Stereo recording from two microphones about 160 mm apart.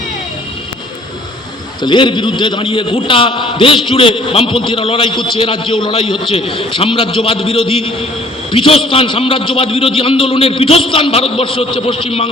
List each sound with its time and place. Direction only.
1.8 s a man's voice: 30° left (ahead or behind)